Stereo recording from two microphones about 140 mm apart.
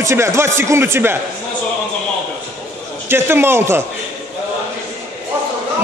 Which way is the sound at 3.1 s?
15° right (ahead or behind).